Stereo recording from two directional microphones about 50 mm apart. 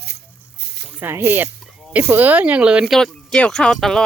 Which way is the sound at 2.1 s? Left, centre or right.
Right.